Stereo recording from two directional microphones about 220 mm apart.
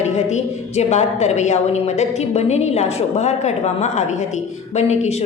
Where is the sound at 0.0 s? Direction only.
30° left (ahead or behind).